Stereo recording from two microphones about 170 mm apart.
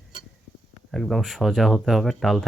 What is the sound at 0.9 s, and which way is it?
Speech, centre (ahead or behind).